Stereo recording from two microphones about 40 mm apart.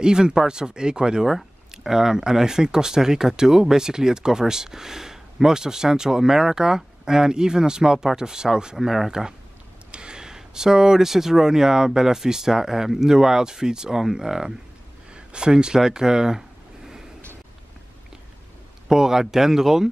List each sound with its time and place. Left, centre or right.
0.0 s speech: centre
8.7 s speech: centre
9.8 s speech: right
15.1 s a sound: right
18.9 s speech: centre